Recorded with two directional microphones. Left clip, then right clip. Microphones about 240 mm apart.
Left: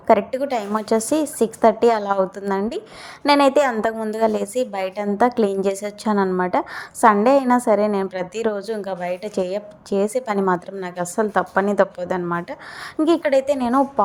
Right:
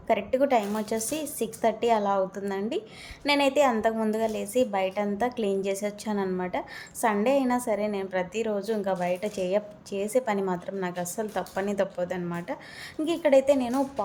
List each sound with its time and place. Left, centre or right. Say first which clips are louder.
0.1 s a woman's voice: left 4 dB; left